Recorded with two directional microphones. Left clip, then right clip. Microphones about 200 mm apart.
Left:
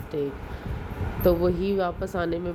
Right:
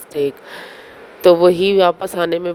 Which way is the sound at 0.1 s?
50° right (ahead or behind).